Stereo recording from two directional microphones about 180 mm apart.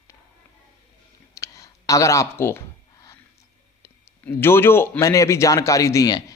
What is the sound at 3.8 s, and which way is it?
Speech, 15° left (ahead or behind).